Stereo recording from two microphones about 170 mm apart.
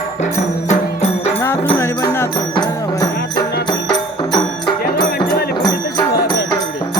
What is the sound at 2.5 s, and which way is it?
Music, 25° left (ahead or behind).